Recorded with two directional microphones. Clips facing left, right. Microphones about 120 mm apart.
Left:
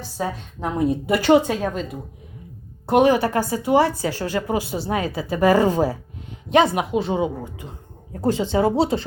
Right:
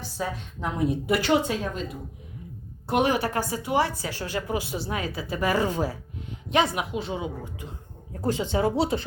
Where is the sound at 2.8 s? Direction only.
40° left (ahead or behind).